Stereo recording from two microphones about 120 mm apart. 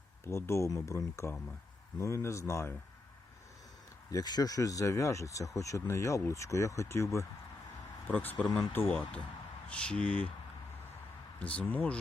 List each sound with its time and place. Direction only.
0.3 s speech: 25° left (ahead or behind)
4.1 s speech: 35° left (ahead or behind); by 10.2 s 10° left (ahead or behind)
11.3 s speech: 10° left (ahead or behind)